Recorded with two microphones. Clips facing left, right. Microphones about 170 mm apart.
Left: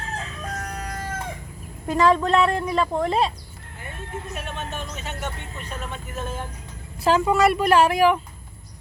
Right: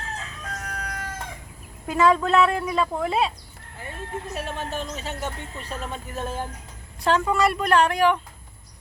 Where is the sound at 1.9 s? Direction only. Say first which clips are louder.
Left 1 dB; 5° right (ahead or behind).